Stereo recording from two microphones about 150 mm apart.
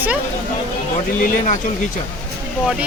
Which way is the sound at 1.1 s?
60° left (ahead or behind).